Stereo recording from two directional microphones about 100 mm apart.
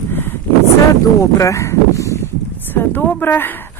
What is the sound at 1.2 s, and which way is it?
Speech, 30° left (ahead or behind).